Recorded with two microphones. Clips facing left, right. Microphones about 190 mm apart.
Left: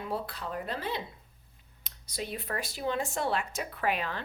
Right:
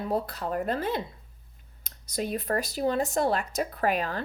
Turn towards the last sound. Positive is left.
turn(degrees=-40)  # may be behind; listen again after turning